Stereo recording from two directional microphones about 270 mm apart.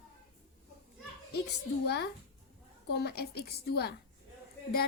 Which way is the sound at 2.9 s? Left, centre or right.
Left.